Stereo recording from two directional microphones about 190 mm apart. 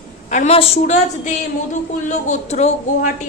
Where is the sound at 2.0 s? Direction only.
40° left (ahead or behind).